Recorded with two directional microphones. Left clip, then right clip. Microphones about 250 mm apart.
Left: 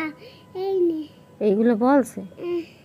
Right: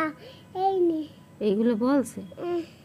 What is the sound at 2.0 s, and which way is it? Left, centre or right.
Speech, centre.